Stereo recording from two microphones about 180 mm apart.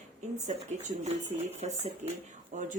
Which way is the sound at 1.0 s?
40° right (ahead or behind).